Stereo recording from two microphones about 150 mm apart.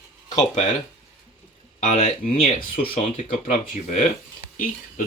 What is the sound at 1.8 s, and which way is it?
Speech, 50° left (ahead or behind).